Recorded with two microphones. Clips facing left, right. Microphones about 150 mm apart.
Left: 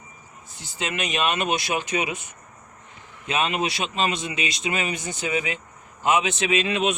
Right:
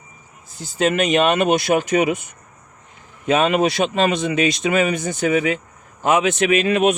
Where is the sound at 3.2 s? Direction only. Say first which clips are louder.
Right 8 dB; 50° right (ahead or behind).